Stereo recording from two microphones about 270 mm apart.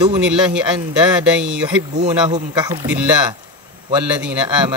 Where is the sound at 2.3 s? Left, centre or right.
Centre.